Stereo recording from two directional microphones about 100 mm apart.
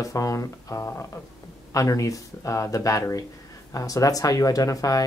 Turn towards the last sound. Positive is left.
turn(degrees=35)  # may be behind; listen again after turning